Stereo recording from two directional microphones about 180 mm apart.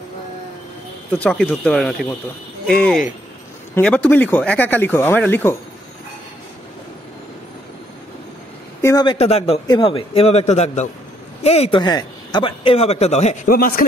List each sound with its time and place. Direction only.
1.1 s speech: 5° left (ahead or behind)
8.8 s speech: 25° left (ahead or behind); by 13.4 s 40° left (ahead or behind)
13.5 s speech: 55° left (ahead or behind)